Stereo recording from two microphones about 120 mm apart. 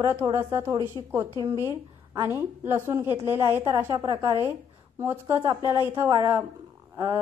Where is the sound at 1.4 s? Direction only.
25° right (ahead or behind).